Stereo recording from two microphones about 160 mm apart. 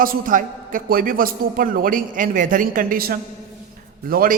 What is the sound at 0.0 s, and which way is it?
A man's voice, 60° right (ahead or behind).